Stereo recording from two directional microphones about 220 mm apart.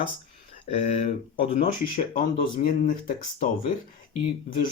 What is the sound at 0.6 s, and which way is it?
Speech, 30° left (ahead or behind).